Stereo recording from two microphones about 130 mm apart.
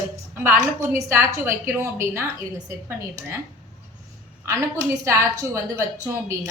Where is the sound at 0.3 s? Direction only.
20° right (ahead or behind).